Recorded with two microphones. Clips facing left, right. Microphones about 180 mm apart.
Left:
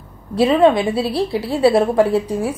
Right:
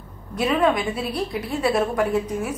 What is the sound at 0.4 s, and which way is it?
A woman's voice, 30° left (ahead or behind).